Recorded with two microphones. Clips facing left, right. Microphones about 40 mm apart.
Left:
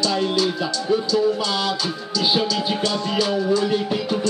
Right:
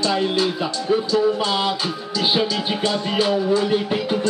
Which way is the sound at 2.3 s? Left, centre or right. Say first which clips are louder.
Even; centre.